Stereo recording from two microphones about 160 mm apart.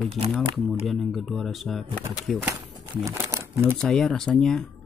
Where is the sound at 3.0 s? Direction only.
20° right (ahead or behind).